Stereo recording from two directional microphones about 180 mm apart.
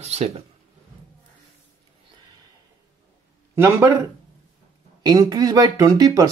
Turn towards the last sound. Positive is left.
turn(degrees=-20)  # may be behind; listen again after turning